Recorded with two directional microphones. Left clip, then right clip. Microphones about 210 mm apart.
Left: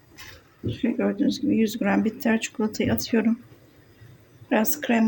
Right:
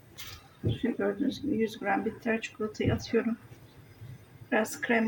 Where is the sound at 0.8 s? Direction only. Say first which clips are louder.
Left 6 dB; 40° left (ahead or behind).